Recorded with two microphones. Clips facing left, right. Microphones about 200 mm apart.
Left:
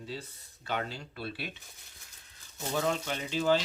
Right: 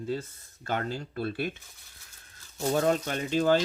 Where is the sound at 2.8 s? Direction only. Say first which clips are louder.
Right 4 dB; 50° right (ahead or behind).